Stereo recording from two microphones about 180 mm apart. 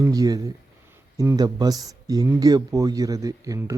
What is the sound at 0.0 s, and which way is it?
Speech, 20° right (ahead or behind).